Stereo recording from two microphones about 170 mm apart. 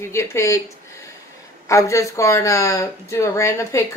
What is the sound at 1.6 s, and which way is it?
Speech, 20° left (ahead or behind).